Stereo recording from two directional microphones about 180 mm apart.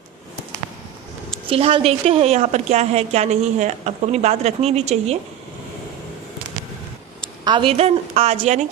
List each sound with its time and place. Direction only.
1.5 s a woman's voice: 30° right (ahead or behind)
7.4 s a woman's voice: 30° right (ahead or behind)